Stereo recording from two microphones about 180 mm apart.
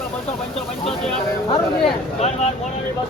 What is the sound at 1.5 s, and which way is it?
Speech, 30° left (ahead or behind).